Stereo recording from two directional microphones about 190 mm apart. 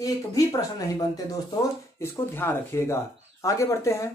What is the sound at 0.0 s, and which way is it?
Speech, 20° left (ahead or behind).